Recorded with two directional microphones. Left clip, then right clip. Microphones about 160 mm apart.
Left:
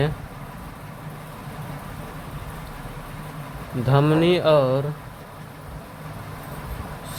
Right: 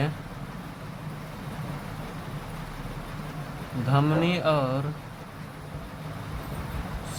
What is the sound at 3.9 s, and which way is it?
Speech, 40° left (ahead or behind).